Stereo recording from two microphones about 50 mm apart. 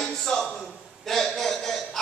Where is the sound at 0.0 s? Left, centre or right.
Centre.